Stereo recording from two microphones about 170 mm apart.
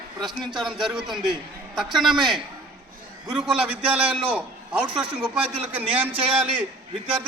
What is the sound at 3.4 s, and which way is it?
A man's voice, 5° right (ahead or behind).